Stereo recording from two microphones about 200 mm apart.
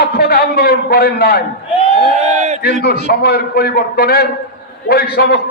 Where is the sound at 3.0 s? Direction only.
50° left (ahead or behind).